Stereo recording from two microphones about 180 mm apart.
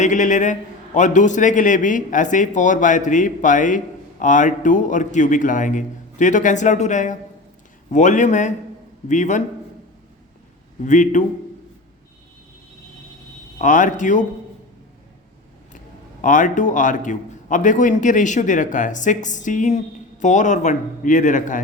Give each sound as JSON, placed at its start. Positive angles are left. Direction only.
{"t": 0.0, "sound": "a man's voice", "side_deg": 45}
{"t": 10.8, "sound": "a man's voice", "side_deg": 45}
{"t": 13.6, "sound": "a man's voice", "side_deg": 45}
{"t": 16.2, "sound": "a man's voice", "side_deg": 45}